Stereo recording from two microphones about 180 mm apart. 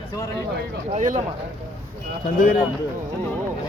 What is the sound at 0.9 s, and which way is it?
Speech, 45° right (ahead or behind).